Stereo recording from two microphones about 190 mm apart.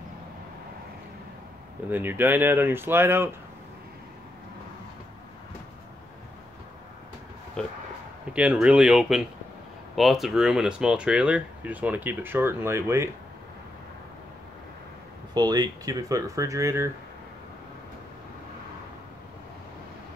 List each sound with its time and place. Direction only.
1.9 s speech: 10° right (ahead or behind)
7.6 s speech: 5° left (ahead or behind); by 13.1 s 15° right (ahead or behind)
15.3 s speech: 20° right (ahead or behind)